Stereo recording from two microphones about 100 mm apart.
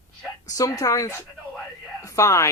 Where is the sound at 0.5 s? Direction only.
35° left (ahead or behind).